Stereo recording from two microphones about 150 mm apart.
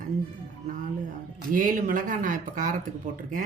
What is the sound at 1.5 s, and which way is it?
Speech, 60° right (ahead or behind).